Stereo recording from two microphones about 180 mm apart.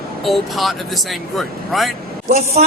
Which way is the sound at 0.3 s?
Centre (ahead or behind).